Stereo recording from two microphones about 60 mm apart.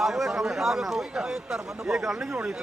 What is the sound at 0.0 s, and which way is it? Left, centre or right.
Speech, centre.